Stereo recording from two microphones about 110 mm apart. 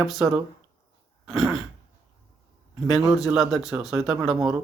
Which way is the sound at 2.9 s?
5° right (ahead or behind).